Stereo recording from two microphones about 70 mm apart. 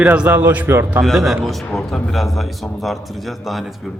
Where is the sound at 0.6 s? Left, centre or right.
Right.